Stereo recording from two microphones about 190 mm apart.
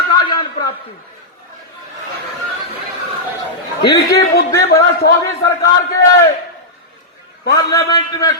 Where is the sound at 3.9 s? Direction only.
60° left (ahead or behind).